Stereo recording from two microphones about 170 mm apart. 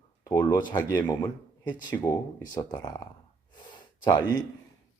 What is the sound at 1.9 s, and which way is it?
Speech, 10° left (ahead or behind).